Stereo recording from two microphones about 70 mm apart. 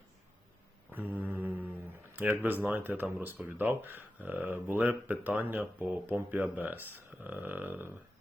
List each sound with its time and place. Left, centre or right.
0.9 s mantra: right
2.3 s speech: right